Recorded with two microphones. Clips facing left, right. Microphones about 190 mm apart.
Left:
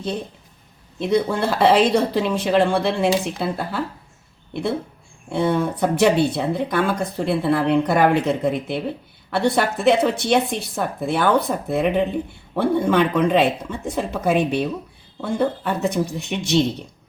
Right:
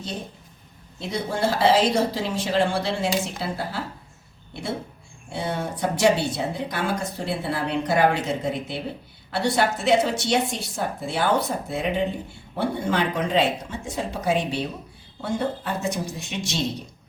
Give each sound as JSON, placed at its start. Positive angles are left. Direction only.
{"t": 1.0, "sound": "speech", "side_deg": 60}
{"t": 5.3, "sound": "speech", "side_deg": 55}